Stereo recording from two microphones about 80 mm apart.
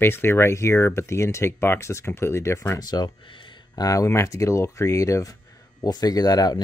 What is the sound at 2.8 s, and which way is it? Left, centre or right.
Speech, left.